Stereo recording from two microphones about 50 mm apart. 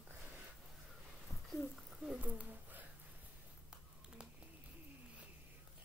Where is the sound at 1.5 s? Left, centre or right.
Centre.